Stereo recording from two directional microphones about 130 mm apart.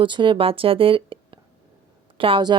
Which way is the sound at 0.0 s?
40° right (ahead or behind).